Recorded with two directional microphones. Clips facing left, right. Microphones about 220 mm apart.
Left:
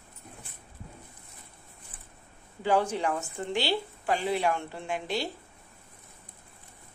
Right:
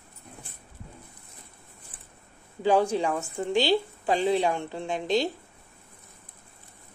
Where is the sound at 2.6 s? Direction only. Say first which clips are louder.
Right 4 dB; 15° right (ahead or behind).